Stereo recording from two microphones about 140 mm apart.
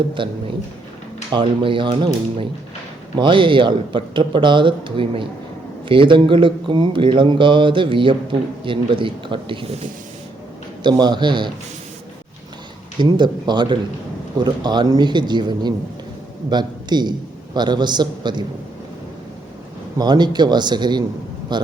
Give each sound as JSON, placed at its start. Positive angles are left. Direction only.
{"t": 0.1, "sound": "speech", "side_deg": -35}
{"t": 3.2, "sound": "speech", "side_deg": -35}
{"t": 10.8, "sound": "speech", "side_deg": -30}
{"t": 13.0, "sound": "a man's voice", "side_deg": -30}
{"t": 20.0, "sound": "speech", "side_deg": -30}